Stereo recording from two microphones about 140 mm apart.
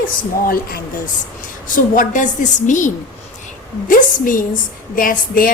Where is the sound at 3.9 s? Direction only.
75° left (ahead or behind).